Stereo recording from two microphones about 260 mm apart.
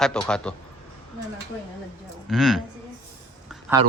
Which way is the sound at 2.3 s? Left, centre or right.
Centre.